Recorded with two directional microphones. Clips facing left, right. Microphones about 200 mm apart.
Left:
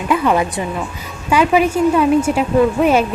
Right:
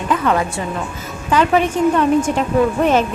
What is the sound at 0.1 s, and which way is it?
A woman's voice, 10° left (ahead or behind).